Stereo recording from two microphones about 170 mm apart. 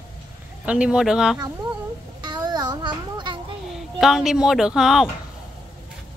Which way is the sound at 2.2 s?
25° right (ahead or behind).